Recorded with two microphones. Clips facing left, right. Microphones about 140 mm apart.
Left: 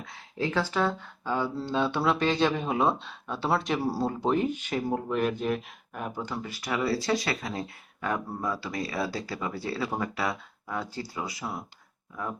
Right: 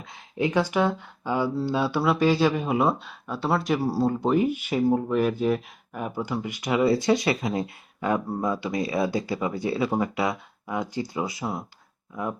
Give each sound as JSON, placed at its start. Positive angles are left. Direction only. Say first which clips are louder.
{"t": 0.0, "sound": "speech", "louder": "right 5 dB", "side_deg": -20}